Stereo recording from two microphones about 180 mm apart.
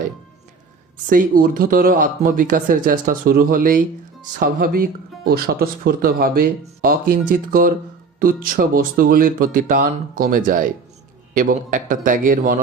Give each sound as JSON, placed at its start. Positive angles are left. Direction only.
{"t": 1.1, "sound": "speech", "side_deg": -50}